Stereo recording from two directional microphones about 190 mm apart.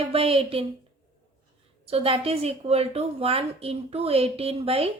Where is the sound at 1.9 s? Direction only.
30° right (ahead or behind).